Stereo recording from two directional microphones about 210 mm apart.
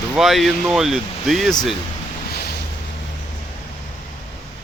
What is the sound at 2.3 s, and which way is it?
Boat, 50° left (ahead or behind).